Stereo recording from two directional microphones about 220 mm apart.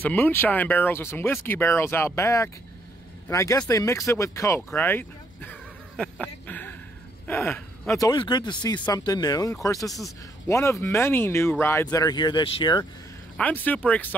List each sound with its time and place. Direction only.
0.0 s speech: 10° left (ahead or behind)
13.4 s speech: 5° left (ahead or behind)